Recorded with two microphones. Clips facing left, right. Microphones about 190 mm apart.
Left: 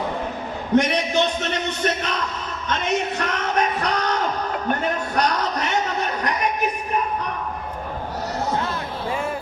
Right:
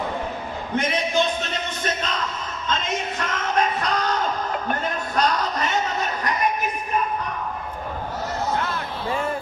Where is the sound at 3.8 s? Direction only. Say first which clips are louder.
Left 1 dB; 65° left (ahead or behind).